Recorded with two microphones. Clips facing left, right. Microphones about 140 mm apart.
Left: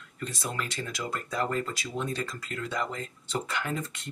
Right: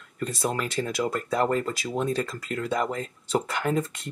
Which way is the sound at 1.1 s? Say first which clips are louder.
Right 4 dB; 50° right (ahead or behind).